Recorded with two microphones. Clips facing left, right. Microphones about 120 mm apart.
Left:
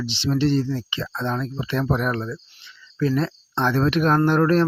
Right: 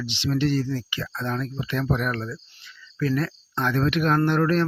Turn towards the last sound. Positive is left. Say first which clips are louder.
# left 3 dB
turn(degrees=40)  # may be behind; listen again after turning